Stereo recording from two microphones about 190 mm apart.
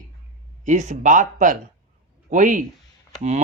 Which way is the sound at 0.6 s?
40° right (ahead or behind).